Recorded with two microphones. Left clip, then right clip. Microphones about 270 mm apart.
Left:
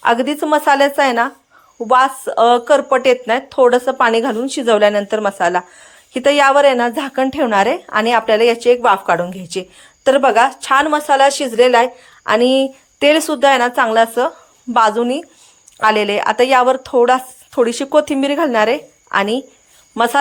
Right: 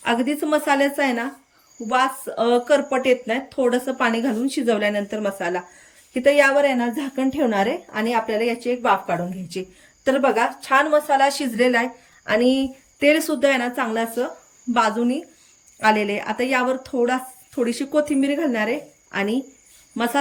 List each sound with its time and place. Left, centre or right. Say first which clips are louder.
0.1 s a woman's voice: left 6 dB; centre
3.1 s speech: left 5 dB; left
3.5 s a woman's voice: left 10 dB; centre
6.8 s a woman's voice: left 8 dB; left
7.2 s a woman's voice: left 6 dB; centre
7.6 s a woman's voice: left 8 dB; left
8.4 s a woman's voice: left 11 dB; centre